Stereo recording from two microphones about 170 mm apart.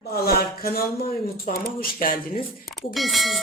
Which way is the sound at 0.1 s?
65° left (ahead or behind).